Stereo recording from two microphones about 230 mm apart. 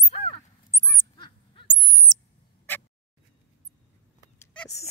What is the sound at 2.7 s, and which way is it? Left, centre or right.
Fowl, centre.